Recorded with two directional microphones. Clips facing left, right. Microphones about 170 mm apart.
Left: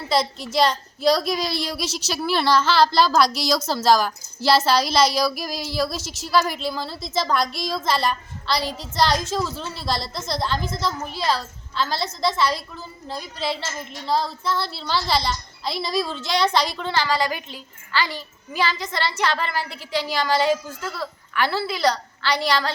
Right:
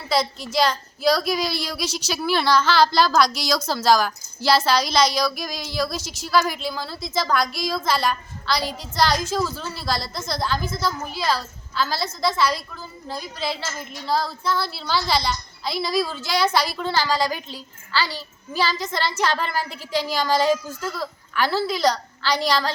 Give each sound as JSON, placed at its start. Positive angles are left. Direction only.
{"t": 0.1, "sound": "a woman's voice", "side_deg": 0}
{"t": 18.1, "sound": "a child's voice", "side_deg": -35}